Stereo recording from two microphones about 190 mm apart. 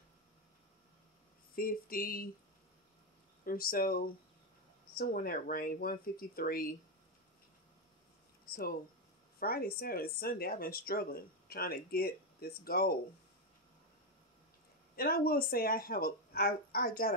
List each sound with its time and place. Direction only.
1.5 s speech: 50° left (ahead or behind)
3.4 s speech: 50° left (ahead or behind)
8.5 s speech: 50° left (ahead or behind)
15.0 s speech: 50° left (ahead or behind)